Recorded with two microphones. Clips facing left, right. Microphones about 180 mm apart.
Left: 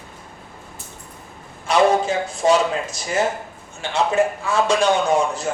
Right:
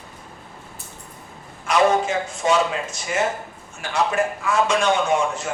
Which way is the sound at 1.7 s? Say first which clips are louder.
Left 2 dB; 35° left (ahead or behind).